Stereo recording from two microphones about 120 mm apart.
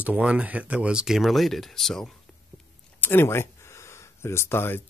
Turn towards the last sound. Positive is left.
turn(degrees=20)  # may be behind; listen again after turning